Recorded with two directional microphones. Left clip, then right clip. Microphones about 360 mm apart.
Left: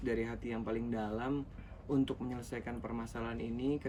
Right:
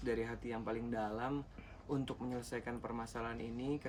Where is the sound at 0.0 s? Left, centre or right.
Centre.